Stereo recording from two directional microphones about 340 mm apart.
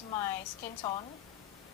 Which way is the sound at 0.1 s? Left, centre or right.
Centre.